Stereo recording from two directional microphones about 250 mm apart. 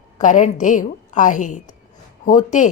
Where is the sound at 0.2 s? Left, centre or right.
Left.